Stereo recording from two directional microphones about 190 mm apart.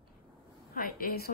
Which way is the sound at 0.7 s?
50° left (ahead or behind).